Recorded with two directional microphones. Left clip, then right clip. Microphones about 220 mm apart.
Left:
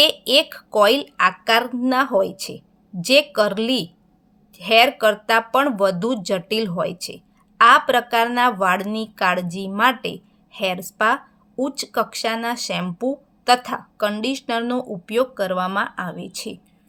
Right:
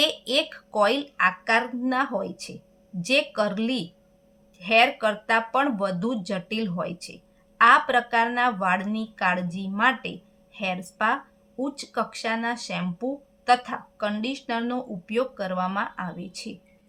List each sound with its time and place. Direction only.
0.0 s a woman's voice: 40° left (ahead or behind)